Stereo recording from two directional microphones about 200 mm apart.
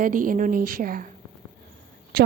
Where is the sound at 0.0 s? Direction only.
40° right (ahead or behind).